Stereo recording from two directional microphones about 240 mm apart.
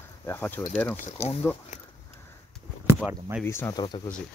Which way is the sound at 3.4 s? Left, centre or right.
Centre.